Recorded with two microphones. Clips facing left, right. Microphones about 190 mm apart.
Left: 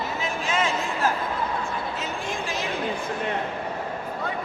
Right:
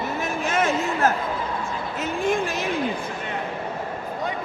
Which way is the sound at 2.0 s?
55° right (ahead or behind).